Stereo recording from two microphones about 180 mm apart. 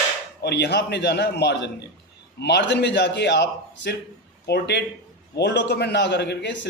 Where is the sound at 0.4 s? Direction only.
65° left (ahead or behind).